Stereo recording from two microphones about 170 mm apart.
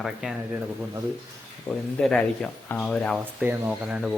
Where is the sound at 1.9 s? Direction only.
5° left (ahead or behind).